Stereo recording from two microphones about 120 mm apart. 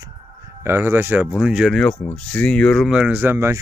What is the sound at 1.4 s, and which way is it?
Speech, 5° right (ahead or behind).